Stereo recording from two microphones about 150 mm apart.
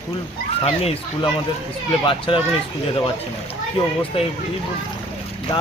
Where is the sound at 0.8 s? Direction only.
40° left (ahead or behind).